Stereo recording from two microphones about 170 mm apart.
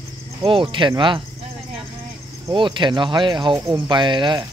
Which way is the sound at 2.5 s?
25° right (ahead or behind).